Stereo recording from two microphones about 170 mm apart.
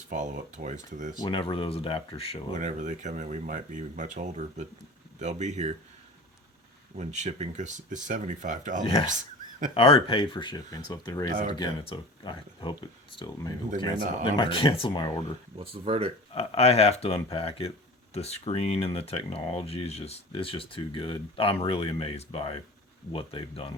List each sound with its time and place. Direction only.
0.1 s speech: 45° right (ahead or behind)
1.2 s speech: 25° left (ahead or behind)
2.5 s speech: 45° right (ahead or behind)
6.9 s speech: 40° right (ahead or behind)
9.7 s speech: 30° left (ahead or behind)
11.3 s speech: 55° right (ahead or behind)
11.5 s speech: 25° left (ahead or behind)
15.5 s speech: 35° right (ahead or behind)
16.3 s speech: 35° left (ahead or behind)